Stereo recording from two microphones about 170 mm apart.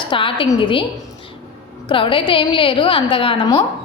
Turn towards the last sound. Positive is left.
turn(degrees=30)  # may be behind; listen again after turning